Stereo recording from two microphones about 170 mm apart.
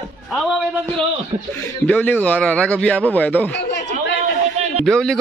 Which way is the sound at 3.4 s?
90° left.